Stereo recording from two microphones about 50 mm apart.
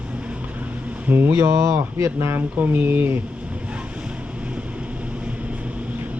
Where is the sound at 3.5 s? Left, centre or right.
Right.